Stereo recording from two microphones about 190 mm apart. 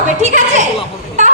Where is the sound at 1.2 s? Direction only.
40° right (ahead or behind).